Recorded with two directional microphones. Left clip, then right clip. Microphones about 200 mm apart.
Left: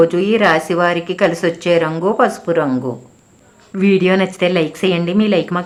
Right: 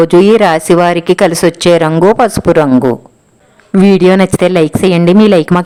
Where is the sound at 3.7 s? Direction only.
45° right (ahead or behind).